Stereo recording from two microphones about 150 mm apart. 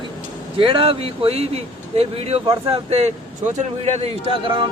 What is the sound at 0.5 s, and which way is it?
Speech, 35° right (ahead or behind).